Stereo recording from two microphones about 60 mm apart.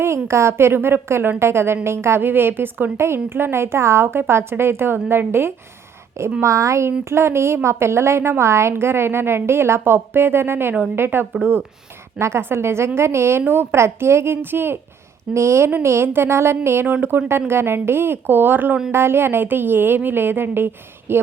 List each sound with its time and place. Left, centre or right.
0.3 s a woman's voice: right
6.4 s a woman's voice: right
15.3 s a woman's voice: right
16.8 s a woman's voice: right